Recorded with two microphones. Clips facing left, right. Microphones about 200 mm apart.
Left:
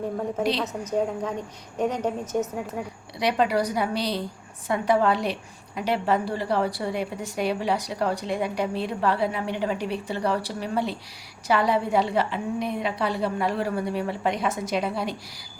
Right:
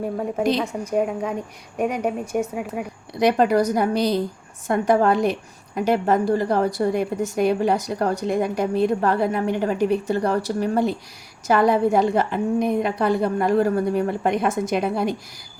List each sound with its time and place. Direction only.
0.6 s a woman's voice: 10° right (ahead or behind)
3.2 s a woman's voice: 45° right (ahead or behind)